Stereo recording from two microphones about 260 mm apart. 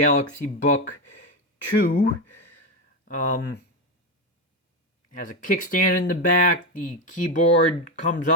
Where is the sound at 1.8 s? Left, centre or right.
Left.